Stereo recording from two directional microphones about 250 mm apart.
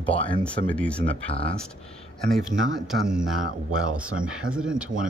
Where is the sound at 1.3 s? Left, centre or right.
Left.